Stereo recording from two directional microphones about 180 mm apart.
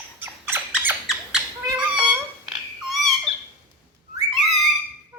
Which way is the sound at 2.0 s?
25° right (ahead or behind).